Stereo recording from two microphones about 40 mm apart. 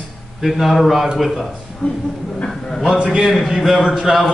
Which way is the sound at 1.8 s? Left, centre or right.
Left.